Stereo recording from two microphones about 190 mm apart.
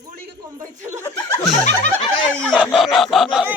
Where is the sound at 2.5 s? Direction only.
Centre (ahead or behind).